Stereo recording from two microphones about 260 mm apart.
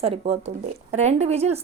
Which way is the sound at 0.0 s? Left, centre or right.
Right.